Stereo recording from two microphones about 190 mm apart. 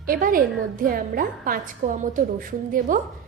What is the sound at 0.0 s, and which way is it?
A woman's voice, 50° right (ahead or behind).